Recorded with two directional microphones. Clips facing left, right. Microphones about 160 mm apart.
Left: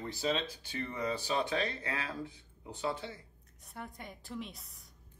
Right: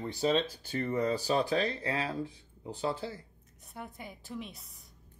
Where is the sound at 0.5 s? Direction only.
40° right (ahead or behind).